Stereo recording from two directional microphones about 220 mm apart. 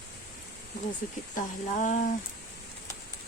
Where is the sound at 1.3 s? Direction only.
35° left (ahead or behind).